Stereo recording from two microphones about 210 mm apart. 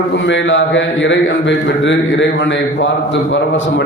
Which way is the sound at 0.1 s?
60° left (ahead or behind).